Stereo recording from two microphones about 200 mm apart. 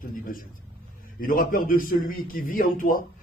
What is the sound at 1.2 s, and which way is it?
A man's voice, 45° left (ahead or behind).